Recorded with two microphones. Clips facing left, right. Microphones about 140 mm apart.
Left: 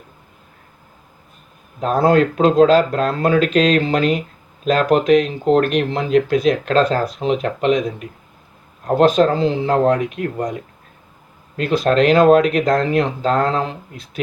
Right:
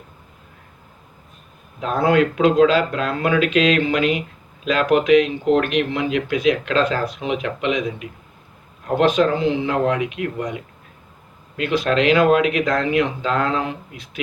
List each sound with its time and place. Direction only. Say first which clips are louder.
1.8 s speech: left 3 dB; 40° left (ahead or behind)